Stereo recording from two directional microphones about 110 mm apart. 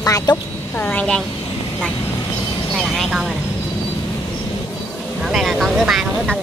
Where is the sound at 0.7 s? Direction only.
15° left (ahead or behind).